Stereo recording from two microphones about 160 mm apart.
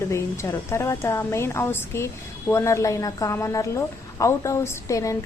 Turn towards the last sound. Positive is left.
turn(degrees=20)  # may be behind; listen again after turning